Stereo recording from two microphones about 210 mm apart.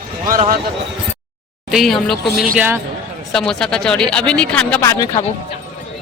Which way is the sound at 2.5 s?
10° right (ahead or behind).